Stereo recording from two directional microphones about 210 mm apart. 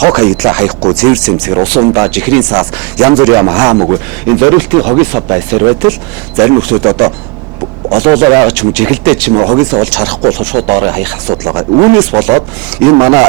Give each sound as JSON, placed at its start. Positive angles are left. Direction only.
{"t": 0.0, "sound": "speech", "side_deg": -15}
{"t": 9.9, "sound": "speech", "side_deg": -5}